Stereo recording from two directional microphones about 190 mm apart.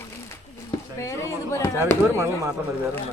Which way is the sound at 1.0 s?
15° left (ahead or behind).